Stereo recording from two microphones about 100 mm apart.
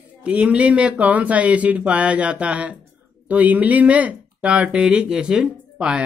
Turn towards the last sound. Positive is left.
turn(degrees=-10)  # may be behind; listen again after turning